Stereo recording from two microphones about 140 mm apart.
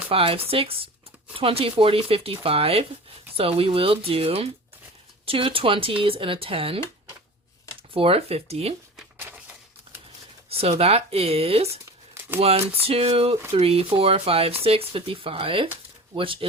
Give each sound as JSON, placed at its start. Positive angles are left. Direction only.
{"t": 0.1, "sound": "speech", "side_deg": -40}
{"t": 7.9, "sound": "speech", "side_deg": -40}
{"t": 10.5, "sound": "speech", "side_deg": -45}